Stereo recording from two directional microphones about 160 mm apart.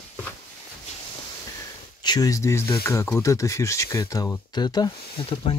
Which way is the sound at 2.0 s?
25° left (ahead or behind).